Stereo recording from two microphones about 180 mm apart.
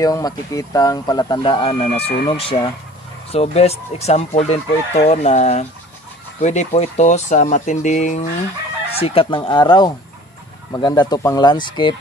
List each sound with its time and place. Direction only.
0.0 s speech: 20° left (ahead or behind)
2.0 s fowl: 35° left (ahead or behind)
8.9 s speech: 30° left (ahead or behind)